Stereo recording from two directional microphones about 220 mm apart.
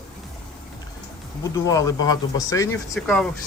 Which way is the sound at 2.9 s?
5° left (ahead or behind).